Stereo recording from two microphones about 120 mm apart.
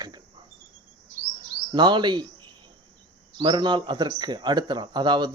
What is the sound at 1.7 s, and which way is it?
Speech, 40° right (ahead or behind).